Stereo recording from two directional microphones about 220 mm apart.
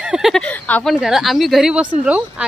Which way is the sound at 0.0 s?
5° right (ahead or behind).